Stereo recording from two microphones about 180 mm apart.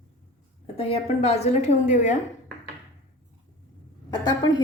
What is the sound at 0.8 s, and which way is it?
A woman's voice, 35° left (ahead or behind).